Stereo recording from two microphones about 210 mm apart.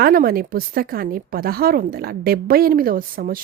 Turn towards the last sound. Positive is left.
turn(degrees=-45)  # may be behind; listen again after turning